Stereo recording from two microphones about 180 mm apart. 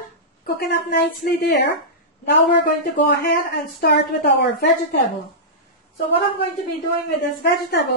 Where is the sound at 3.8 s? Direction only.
60° left (ahead or behind).